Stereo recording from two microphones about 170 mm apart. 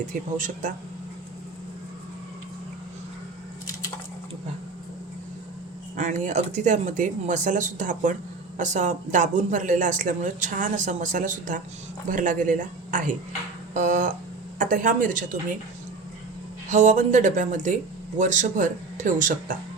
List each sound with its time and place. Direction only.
0.1 s speech: 50° right (ahead or behind)
6.0 s speech: 45° right (ahead or behind)
16.6 s speech: 45° right (ahead or behind)